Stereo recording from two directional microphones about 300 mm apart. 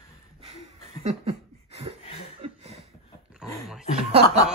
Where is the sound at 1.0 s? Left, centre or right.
Right.